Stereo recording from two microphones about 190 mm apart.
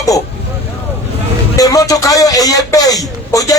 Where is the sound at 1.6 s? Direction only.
20° left (ahead or behind).